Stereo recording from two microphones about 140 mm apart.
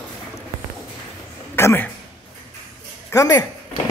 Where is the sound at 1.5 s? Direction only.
15° left (ahead or behind).